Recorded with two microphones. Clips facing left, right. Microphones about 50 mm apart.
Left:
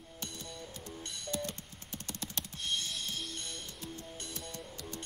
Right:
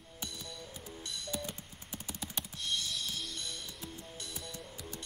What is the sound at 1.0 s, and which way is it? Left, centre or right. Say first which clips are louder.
Telephone dialing: right 3 dB; left.